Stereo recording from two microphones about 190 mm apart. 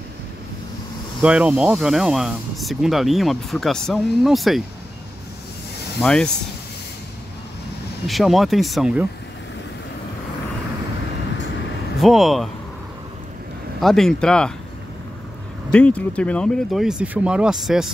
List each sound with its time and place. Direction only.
1.2 s speech: 5° right (ahead or behind)
5.9 s speech: 5° left (ahead or behind)
8.1 s speech: centre (ahead or behind)
12.0 s speech: centre (ahead or behind)
13.7 s speech: centre (ahead or behind)
15.7 s speech: 5° left (ahead or behind)